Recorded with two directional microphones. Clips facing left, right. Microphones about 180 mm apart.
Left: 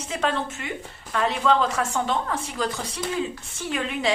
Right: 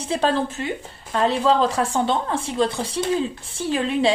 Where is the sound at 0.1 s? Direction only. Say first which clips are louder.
Right 5 dB; 35° right (ahead or behind).